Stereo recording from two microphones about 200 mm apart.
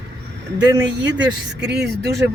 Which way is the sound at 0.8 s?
60° right (ahead or behind).